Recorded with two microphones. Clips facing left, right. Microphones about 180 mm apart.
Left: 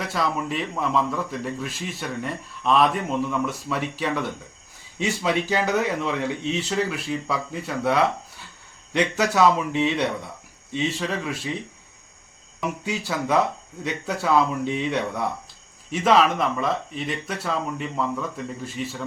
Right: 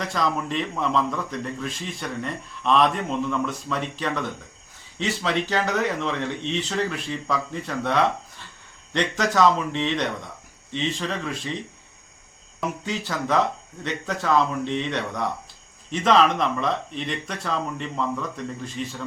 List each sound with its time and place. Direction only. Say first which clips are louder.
0.0 s a man's voice: even; 5° left (ahead or behind)
12.8 s a man's voice: left 1 dB; 10° left (ahead or behind)